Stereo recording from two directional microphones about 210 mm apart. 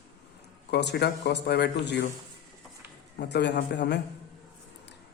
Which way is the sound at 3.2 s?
55° left (ahead or behind).